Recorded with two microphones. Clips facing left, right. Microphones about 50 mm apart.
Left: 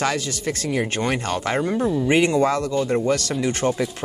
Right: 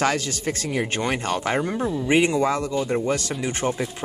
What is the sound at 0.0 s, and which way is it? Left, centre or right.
Speech, right.